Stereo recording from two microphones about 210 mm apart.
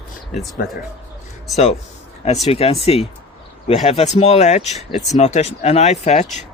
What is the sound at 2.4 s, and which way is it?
Speech, 30° left (ahead or behind).